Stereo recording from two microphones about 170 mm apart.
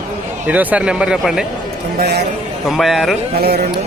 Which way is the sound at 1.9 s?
70° right (ahead or behind).